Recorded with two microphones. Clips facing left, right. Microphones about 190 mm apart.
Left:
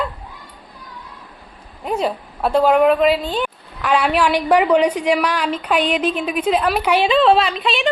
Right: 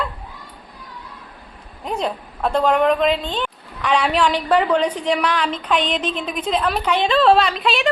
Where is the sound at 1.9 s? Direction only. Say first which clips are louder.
Left 3 dB; 5° left (ahead or behind).